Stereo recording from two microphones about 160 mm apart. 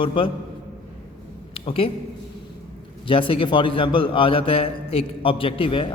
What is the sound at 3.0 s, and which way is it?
A man's voice, 35° left (ahead or behind).